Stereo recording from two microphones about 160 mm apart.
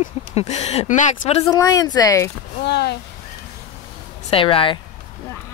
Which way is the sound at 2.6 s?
90° left.